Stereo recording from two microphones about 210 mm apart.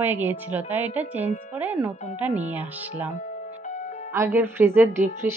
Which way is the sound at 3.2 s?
35° left (ahead or behind).